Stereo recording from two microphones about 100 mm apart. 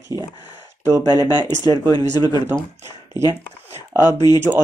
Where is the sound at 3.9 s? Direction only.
45° left (ahead or behind).